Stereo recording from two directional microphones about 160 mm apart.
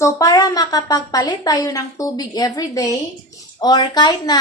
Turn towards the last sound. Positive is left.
turn(degrees=25)  # may be behind; listen again after turning